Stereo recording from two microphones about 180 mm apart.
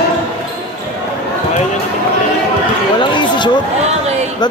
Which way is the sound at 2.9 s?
25° left (ahead or behind).